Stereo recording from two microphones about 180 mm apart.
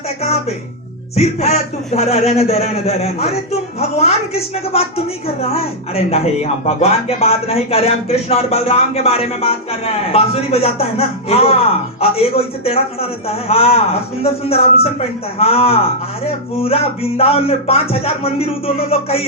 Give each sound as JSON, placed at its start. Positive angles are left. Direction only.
{"t": 0.2, "sound": "a man's voice", "side_deg": 35}